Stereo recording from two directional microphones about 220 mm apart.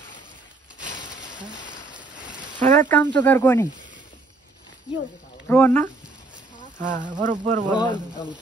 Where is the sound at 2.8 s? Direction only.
10° left (ahead or behind).